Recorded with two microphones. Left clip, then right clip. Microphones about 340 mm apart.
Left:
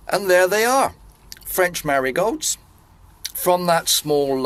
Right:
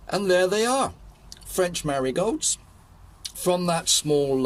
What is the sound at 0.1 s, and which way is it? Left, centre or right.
Speech, left.